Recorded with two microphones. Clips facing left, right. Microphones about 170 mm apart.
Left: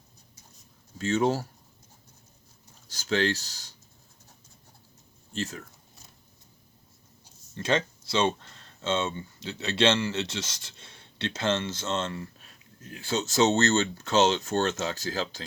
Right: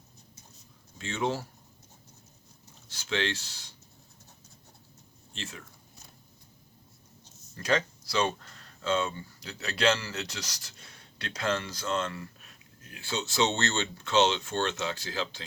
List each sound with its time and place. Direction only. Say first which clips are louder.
0.9 s speech: left 6 dB; 40° left (ahead or behind)
2.9 s speech: left 5 dB; 40° left (ahead or behind)
5.3 s speech: left 8 dB; 40° left (ahead or behind)
7.5 s speech: left 1 dB; 25° left (ahead or behind)